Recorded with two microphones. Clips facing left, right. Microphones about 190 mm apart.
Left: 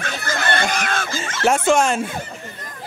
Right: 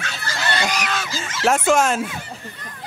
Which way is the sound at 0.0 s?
50° left (ahead or behind).